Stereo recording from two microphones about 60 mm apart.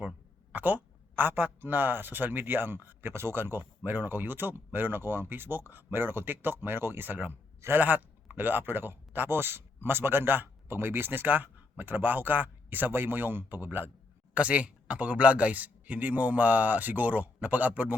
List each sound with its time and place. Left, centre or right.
0.5 s speech: right
14.3 s speech: right